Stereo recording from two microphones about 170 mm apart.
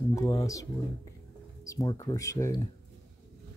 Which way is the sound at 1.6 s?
20° left (ahead or behind).